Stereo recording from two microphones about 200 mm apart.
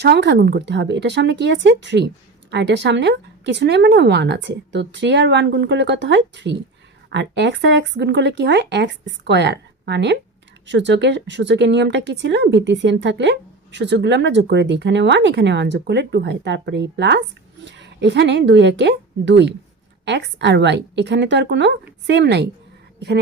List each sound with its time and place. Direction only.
0.0 s a woman's voice: 55° right (ahead or behind)